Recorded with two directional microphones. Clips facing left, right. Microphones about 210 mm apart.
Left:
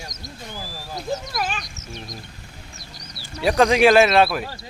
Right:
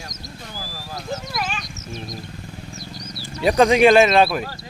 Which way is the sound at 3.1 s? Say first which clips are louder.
Right 2 dB; centre (ahead or behind).